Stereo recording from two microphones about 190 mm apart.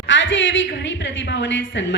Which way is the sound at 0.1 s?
75° left (ahead or behind).